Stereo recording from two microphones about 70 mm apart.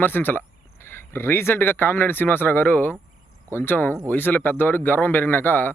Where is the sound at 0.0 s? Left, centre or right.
Left.